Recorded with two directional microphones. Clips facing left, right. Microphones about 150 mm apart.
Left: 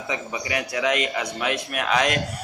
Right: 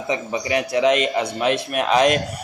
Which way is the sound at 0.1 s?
25° right (ahead or behind).